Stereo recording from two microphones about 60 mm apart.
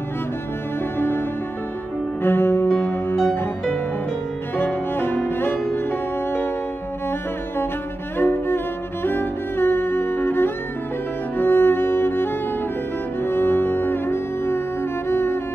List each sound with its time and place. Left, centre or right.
0.9 s music: left
2.2 s music: left
4.9 s cello: left
5.8 s music: left
8.2 s music: left